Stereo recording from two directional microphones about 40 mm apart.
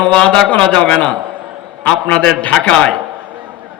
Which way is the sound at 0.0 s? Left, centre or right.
Left.